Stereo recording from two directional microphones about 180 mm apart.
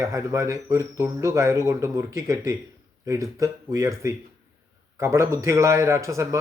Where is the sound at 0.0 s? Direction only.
15° right (ahead or behind).